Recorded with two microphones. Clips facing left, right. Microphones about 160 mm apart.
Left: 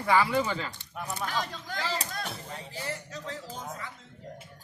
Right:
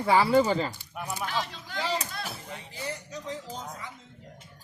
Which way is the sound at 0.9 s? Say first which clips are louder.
Right 1 dB; 10° right (ahead or behind).